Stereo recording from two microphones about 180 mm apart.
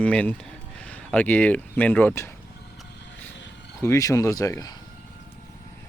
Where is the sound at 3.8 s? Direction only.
15° left (ahead or behind).